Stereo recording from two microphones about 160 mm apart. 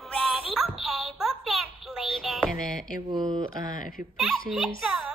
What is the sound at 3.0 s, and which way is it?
Speech, 30° right (ahead or behind).